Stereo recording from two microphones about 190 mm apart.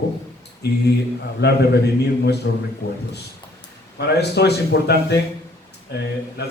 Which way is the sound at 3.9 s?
60° left (ahead or behind).